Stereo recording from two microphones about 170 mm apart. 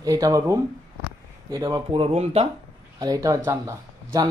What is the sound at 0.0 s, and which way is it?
Speech, 20° right (ahead or behind).